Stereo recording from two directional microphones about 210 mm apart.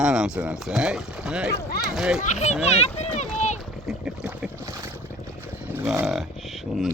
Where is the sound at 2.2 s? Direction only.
35° left (ahead or behind).